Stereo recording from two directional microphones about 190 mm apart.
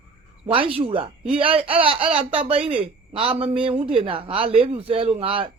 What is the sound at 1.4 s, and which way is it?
Speech, 30° right (ahead or behind).